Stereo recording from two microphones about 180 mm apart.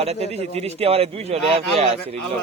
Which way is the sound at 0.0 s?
35° right (ahead or behind).